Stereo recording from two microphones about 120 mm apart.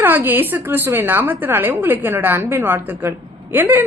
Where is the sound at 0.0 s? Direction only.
15° right (ahead or behind).